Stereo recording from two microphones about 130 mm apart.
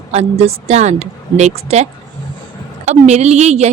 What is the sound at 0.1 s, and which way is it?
Speech, 55° right (ahead or behind).